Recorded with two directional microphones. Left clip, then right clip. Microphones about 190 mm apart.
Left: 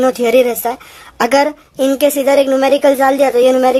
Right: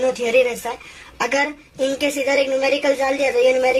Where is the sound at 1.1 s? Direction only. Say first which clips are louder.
Left 8 dB; 50° left (ahead or behind).